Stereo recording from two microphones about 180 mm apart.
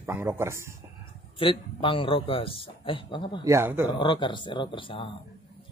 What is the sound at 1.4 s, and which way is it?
Speech, 30° left (ahead or behind).